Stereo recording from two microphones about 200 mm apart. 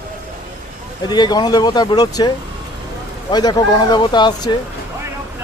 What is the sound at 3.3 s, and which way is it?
Speech, 20° left (ahead or behind).